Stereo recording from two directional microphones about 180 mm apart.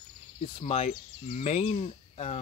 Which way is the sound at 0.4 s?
35° left (ahead or behind).